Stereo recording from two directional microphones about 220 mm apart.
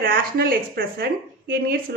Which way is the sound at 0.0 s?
40° right (ahead or behind).